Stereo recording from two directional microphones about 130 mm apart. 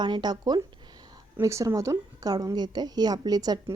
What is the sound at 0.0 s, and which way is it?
A woman's voice, 35° right (ahead or behind).